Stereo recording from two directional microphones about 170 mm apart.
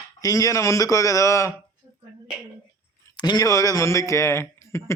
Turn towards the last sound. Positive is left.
turn(degrees=15)  # may be behind; listen again after turning